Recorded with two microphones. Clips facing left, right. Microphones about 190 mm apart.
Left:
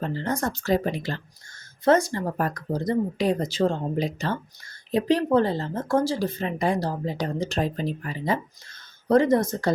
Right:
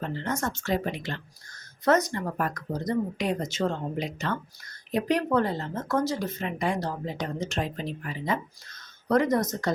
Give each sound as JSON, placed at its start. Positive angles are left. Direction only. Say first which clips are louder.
{"t": 0.0, "sound": "speech", "louder": "left 3 dB", "side_deg": 35}